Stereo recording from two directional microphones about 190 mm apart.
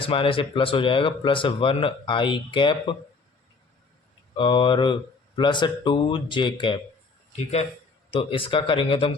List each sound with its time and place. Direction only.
0.0 s speech: 30° left (ahead or behind)
4.4 s speech: 25° left (ahead or behind)
8.1 s speech: 30° left (ahead or behind)